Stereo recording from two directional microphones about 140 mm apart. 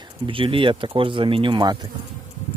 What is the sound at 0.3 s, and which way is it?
Speech, 40° right (ahead or behind).